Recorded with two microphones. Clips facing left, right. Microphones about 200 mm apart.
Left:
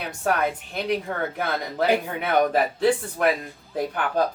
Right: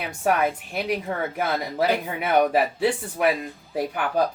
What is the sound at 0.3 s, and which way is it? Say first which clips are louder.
Speech: right 2 dB; 10° right (ahead or behind).